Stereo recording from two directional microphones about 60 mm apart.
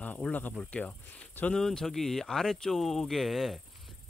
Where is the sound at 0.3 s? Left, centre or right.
Left.